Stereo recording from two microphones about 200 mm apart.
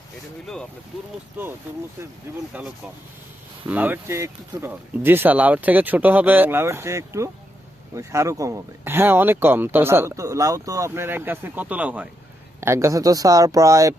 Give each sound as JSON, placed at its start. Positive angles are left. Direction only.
{"t": 0.4, "sound": "speech", "side_deg": 5}
{"t": 2.5, "sound": "speech", "side_deg": -5}